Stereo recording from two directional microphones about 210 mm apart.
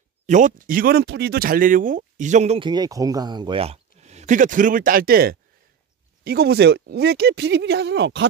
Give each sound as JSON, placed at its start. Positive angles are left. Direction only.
{"t": 0.3, "sound": "speech", "side_deg": -40}